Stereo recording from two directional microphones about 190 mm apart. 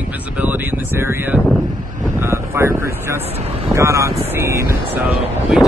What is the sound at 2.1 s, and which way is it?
Vehicle, 15° right (ahead or behind).